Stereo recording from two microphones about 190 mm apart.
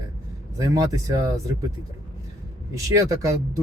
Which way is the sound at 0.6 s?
20° right (ahead or behind).